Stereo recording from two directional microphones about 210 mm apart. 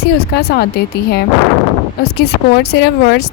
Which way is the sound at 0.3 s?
50° left (ahead or behind).